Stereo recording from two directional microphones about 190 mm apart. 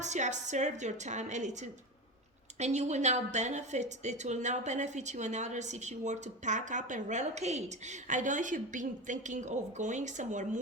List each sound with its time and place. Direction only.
0.0 s a woman's voice: 40° right (ahead or behind)